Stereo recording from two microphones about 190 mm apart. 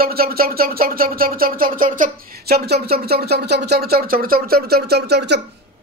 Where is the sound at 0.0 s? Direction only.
50° right (ahead or behind).